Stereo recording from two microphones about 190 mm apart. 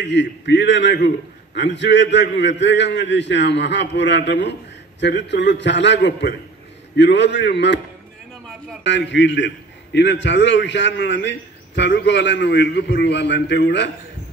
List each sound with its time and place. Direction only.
0.0 s a man's voice: 70° left (ahead or behind)
8.8 s a man's voice: 70° left (ahead or behind)